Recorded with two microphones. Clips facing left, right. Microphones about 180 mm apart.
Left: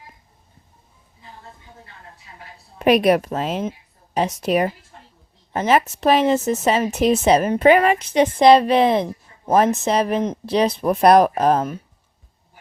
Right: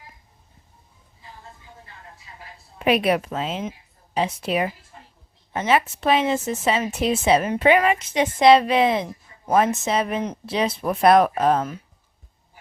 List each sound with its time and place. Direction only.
2.7 s a woman's voice: 40° left (ahead or behind)